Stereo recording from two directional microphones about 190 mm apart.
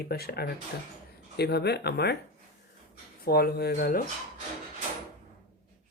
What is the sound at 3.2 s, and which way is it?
Speech, 55° left (ahead or behind).